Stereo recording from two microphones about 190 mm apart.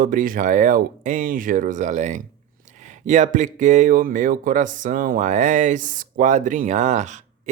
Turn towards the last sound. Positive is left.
turn(degrees=-40)  # may be behind; listen again after turning